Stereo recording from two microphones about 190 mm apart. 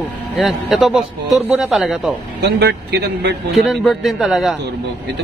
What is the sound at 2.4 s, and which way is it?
Speech, 60° right (ahead or behind).